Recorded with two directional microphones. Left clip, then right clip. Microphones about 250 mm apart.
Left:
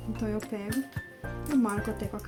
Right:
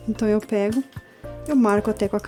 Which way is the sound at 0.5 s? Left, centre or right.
Right.